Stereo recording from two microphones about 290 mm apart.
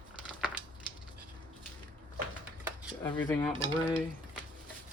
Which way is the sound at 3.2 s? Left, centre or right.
Centre.